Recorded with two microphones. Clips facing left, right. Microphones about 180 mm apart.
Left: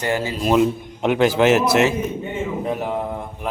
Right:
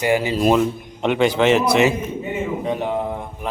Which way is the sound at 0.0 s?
15° right (ahead or behind).